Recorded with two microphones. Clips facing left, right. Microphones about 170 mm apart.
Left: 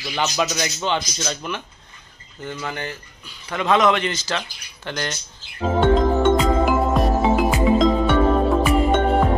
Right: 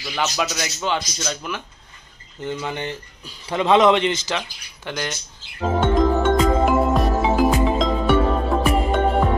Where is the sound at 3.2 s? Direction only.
30° right (ahead or behind); by 5.2 s 10° right (ahead or behind).